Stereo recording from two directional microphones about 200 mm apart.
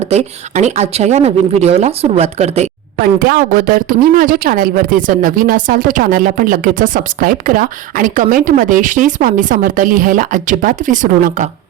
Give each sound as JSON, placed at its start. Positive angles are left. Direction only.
{"t": 0.1, "sound": "speech", "side_deg": -35}
{"t": 3.0, "sound": "speech", "side_deg": -45}